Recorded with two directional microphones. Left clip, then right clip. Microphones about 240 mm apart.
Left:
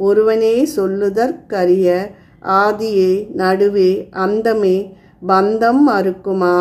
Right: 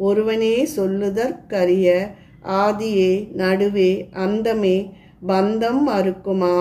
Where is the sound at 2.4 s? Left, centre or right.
Centre.